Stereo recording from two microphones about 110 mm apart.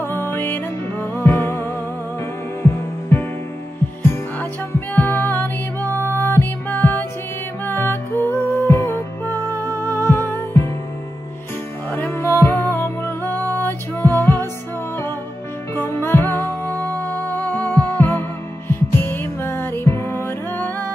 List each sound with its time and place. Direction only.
0.0 s music: 20° left (ahead or behind)
11.9 s music: 20° left (ahead or behind)
15.7 s music: 20° left (ahead or behind)